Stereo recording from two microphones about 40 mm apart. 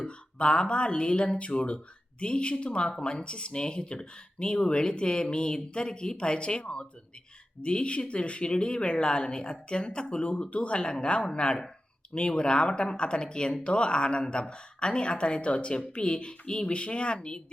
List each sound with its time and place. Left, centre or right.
0.0 s speech: left